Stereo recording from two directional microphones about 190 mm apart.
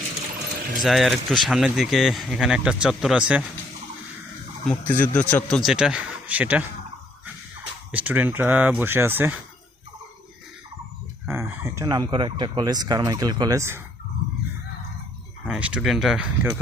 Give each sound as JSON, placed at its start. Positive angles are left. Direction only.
{"t": 0.8, "sound": "speech", "side_deg": 0}
{"t": 4.6, "sound": "speech", "side_deg": 10}
{"t": 7.9, "sound": "speech", "side_deg": -10}
{"t": 11.3, "sound": "speech", "side_deg": -15}
{"t": 15.4, "sound": "speech", "side_deg": -5}